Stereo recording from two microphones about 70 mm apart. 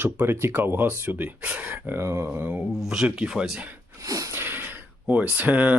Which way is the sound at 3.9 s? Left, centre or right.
Right.